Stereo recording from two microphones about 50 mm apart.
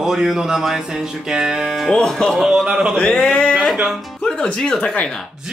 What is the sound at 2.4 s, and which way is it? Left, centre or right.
Music, centre.